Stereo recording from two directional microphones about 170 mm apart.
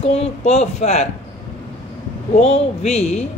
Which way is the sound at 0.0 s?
35° left (ahead or behind).